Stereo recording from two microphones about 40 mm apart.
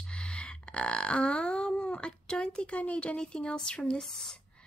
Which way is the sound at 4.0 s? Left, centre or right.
Centre.